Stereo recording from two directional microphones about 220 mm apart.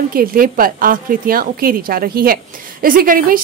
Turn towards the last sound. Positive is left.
turn(degrees=-40)  # may be behind; listen again after turning